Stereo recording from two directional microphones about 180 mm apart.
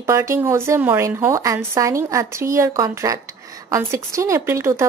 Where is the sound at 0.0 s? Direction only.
15° right (ahead or behind).